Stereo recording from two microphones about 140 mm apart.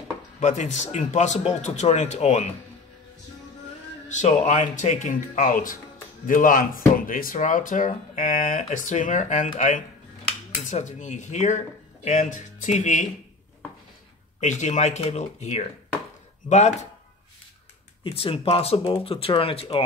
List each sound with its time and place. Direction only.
0.4 s speech: 55° left (ahead or behind)
4.1 s speech: 60° left (ahead or behind)
14.4 s speech: 55° left (ahead or behind)
18.0 s speech: 40° left (ahead or behind)